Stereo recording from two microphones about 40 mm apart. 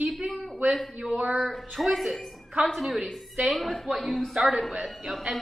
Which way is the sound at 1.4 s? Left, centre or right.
Centre.